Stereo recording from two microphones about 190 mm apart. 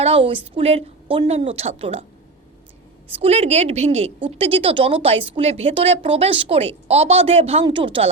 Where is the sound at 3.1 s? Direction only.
35° right (ahead or behind).